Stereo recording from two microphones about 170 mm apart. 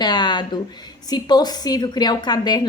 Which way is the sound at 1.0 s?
25° left (ahead or behind).